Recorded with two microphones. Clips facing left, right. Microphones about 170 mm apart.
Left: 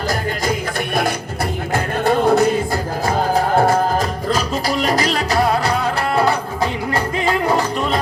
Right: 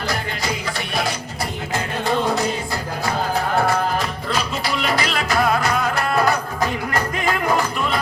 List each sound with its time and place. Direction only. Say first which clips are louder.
1.7 s music: left 5 dB; 55° left (ahead or behind)
3.1 s music: left 5 dB; 45° left (ahead or behind)